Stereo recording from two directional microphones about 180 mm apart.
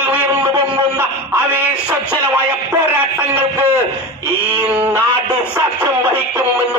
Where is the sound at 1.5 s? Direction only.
10° right (ahead or behind).